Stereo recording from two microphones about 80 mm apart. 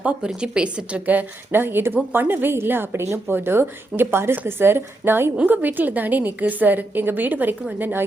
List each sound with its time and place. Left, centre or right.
0.0 s a woman's voice: centre